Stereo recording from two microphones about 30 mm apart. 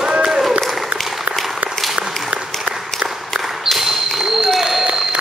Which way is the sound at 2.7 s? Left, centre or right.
Right.